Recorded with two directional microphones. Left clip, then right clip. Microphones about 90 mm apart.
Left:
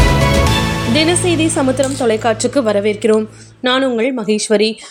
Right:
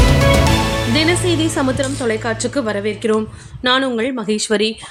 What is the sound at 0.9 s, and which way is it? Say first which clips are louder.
Speech: left 3 dB; 20° left (ahead or behind).